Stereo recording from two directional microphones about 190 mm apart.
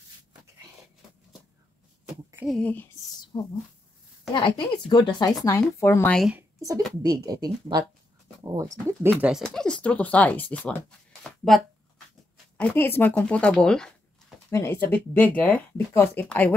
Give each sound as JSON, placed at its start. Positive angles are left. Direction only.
{"t": 2.4, "sound": "speech", "side_deg": 5}
{"t": 3.3, "sound": "speech", "side_deg": 25}
{"t": 6.2, "sound": "speech", "side_deg": -10}
{"t": 9.2, "sound": "speech", "side_deg": 0}